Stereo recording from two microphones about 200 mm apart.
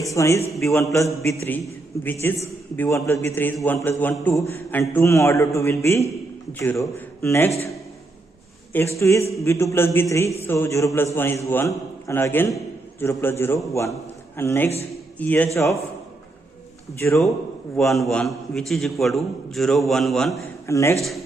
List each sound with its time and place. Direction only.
0.0 s a man's voice: 15° left (ahead or behind)
8.7 s a man's voice: 15° left (ahead or behind)
17.0 s a man's voice: 15° left (ahead or behind)
17.7 s a man's voice: centre (ahead or behind)
20.7 s a man's voice: 15° left (ahead or behind)